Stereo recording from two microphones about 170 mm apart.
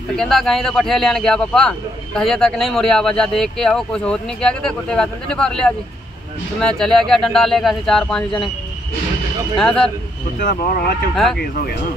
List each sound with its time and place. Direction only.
0.1 s a man's voice: centre (ahead or behind)
6.8 s a man's voice: centre (ahead or behind)
9.6 s a man's voice: 5° left (ahead or behind)
10.4 s speech: 55° left (ahead or behind)